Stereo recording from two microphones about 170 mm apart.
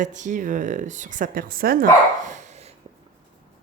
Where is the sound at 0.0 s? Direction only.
45° right (ahead or behind).